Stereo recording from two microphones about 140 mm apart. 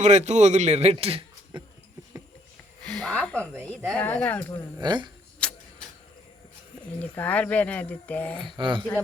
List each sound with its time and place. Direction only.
0.0 s a man's voice: 55° right (ahead or behind)
2.9 s a sound: 5° left (ahead or behind)
3.8 s speech: 10° left (ahead or behind)
4.8 s speech: 30° right (ahead or behind)
5.4 s a sound: 5° left (ahead or behind)
7.0 s speech: 10° left (ahead or behind)
8.4 s speech: 35° right (ahead or behind)